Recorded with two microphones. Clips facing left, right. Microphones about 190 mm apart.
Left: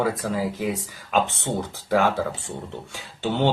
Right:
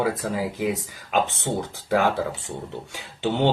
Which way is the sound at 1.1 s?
15° right (ahead or behind).